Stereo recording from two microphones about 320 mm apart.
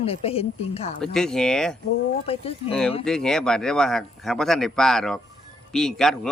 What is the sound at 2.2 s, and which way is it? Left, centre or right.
Speech, centre.